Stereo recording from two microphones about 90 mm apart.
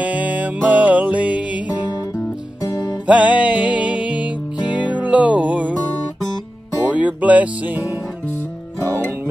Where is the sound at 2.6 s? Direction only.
45° left (ahead or behind).